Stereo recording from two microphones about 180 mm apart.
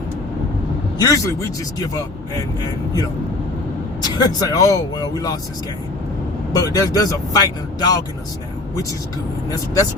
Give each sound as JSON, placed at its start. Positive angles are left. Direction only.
{"t": 0.9, "sound": "speech", "side_deg": 20}
{"t": 4.0, "sound": "speech", "side_deg": 20}
{"t": 6.5, "sound": "speech", "side_deg": 20}